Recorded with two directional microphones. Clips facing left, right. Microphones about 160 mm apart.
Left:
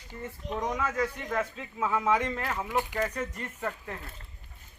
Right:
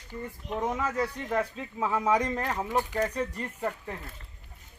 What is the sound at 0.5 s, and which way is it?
Speech, 10° right (ahead or behind).